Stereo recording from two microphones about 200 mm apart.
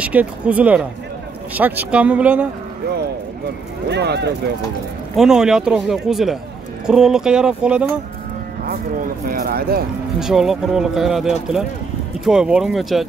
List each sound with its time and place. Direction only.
0.0 s speech: 5° right (ahead or behind)
3.9 s speech: 55° right (ahead or behind)
5.1 s speech: centre (ahead or behind)
8.6 s speech: 45° right (ahead or behind)
10.2 s speech: centre (ahead or behind)